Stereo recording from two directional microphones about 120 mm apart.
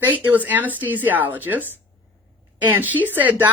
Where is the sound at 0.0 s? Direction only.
15° right (ahead or behind).